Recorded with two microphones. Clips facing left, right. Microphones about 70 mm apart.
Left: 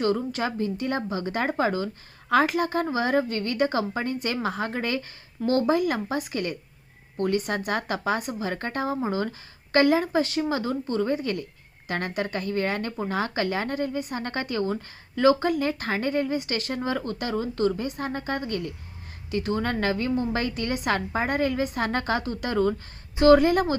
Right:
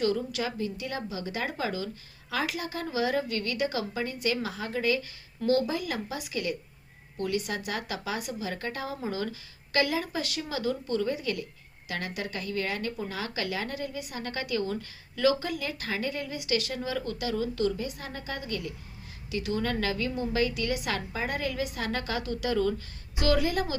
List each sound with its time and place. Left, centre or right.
0.0 s speech: left